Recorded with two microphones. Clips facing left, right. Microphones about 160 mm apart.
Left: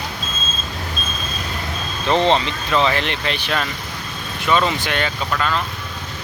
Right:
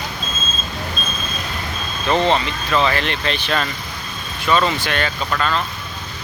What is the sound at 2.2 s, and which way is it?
Speech, 25° left (ahead or behind).